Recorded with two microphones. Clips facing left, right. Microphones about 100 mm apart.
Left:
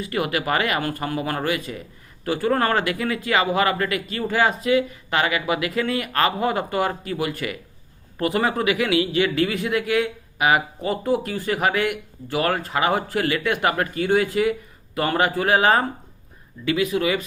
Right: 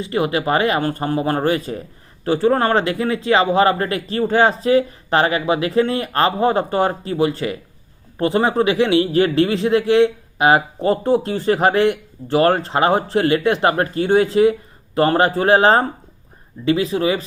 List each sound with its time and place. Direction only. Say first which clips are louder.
0.0 s speech: right 5 dB; 25° right (ahead or behind)